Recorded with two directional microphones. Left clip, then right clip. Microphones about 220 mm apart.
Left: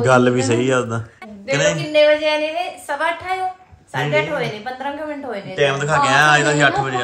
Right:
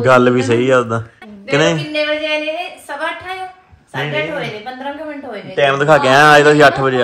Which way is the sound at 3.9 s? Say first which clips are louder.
Left 1 dB; 5° left (ahead or behind).